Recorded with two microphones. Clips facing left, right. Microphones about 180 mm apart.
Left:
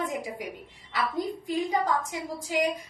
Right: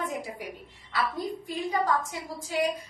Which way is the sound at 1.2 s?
20° left (ahead or behind).